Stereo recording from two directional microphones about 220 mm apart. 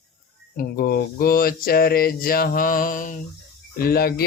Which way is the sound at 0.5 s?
40° left (ahead or behind).